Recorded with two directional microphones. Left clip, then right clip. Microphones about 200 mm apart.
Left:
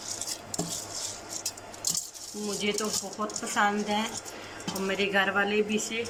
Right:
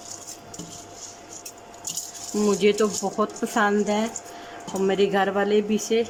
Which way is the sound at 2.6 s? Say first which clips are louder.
Right 6 dB; 45° right (ahead or behind).